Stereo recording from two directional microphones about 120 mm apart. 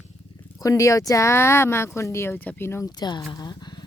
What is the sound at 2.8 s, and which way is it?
Speech, 35° left (ahead or behind).